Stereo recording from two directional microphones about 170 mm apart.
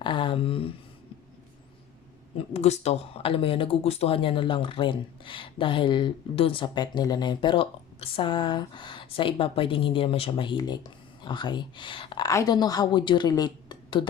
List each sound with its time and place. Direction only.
0.0 s speech: 30° left (ahead or behind)
2.5 s speech: 40° left (ahead or behind)